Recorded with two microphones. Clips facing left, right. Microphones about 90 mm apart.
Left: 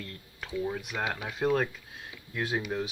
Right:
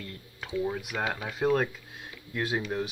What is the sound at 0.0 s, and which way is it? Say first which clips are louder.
Speech: right 1 dB; 5° right (ahead or behind).